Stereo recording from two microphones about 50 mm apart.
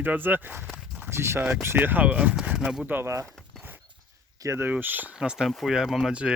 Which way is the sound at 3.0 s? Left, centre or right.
Right.